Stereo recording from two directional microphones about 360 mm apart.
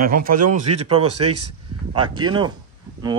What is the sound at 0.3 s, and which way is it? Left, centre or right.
Speech, right.